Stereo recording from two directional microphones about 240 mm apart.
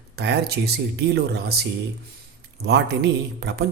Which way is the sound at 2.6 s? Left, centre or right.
Right.